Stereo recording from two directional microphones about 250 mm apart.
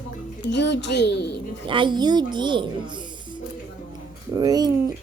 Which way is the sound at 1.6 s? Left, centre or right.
Centre.